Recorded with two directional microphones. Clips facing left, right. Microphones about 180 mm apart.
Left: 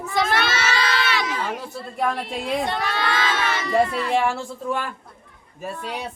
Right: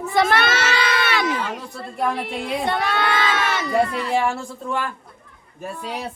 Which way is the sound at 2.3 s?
55° right (ahead or behind).